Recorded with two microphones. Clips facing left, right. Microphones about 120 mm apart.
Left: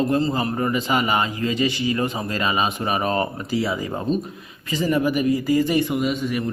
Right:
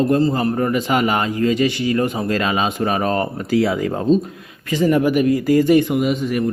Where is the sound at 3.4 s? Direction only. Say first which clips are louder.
Right 6 dB; 65° right (ahead or behind).